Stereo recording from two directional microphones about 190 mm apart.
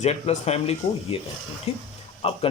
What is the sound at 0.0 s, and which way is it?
Speech, 35° left (ahead or behind).